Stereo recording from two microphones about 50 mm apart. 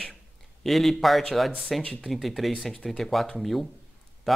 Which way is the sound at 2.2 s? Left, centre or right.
Centre.